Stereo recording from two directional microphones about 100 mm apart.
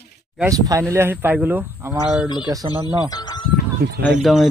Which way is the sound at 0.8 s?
25° right (ahead or behind).